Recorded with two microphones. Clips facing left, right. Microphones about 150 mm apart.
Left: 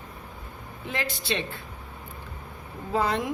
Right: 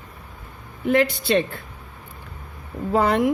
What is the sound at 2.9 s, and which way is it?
Speech, 60° right (ahead or behind).